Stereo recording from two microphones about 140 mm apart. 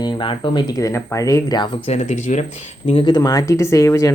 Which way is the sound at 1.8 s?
50° left (ahead or behind).